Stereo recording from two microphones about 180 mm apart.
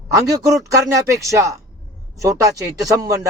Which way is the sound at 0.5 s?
20° right (ahead or behind).